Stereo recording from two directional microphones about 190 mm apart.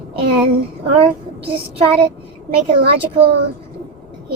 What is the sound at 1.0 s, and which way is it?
Speech, 30° right (ahead or behind).